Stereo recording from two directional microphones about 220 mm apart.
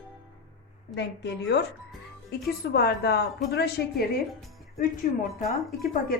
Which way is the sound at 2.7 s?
45° left (ahead or behind).